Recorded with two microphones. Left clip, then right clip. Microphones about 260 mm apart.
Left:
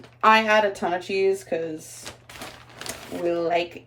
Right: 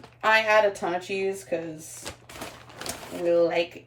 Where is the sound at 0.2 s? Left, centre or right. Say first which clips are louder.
Left 3 dB; centre.